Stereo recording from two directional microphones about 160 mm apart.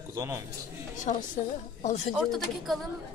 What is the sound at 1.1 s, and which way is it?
Speech, 55° left (ahead or behind).